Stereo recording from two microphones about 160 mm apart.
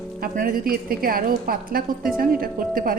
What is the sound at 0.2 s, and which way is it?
A woman's voice, 60° right (ahead or behind).